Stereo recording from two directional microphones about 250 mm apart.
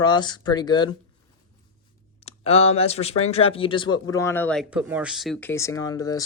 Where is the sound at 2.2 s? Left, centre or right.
Left.